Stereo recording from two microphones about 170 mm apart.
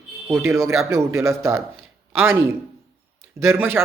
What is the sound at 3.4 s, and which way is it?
Speech, 15° right (ahead or behind).